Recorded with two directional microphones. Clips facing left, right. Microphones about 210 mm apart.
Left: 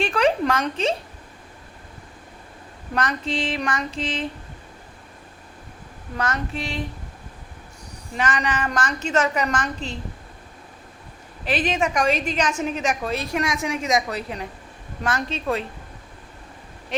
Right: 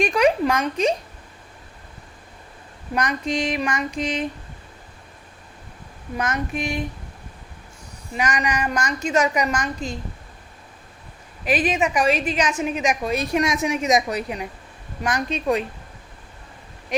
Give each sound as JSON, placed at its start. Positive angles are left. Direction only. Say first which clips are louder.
{"t": 0.0, "sound": "a woman's voice", "louder": "right 2 dB", "side_deg": -10}
{"t": 2.9, "sound": "a woman's voice", "louder": "right 2 dB", "side_deg": -15}
{"t": 6.1, "sound": "a woman's voice", "louder": "right 2 dB", "side_deg": -15}
{"t": 8.2, "sound": "a woman's voice", "louder": "right 1 dB", "side_deg": -10}
{"t": 11.4, "sound": "a woman's voice", "louder": "right 2 dB", "side_deg": -10}